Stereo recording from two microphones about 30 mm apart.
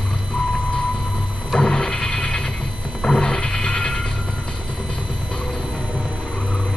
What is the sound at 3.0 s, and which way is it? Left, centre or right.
Wild animals, left.